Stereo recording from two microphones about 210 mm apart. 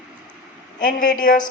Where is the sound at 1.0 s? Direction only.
40° left (ahead or behind).